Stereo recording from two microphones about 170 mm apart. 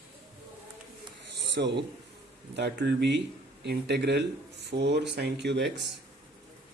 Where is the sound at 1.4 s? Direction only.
90° right.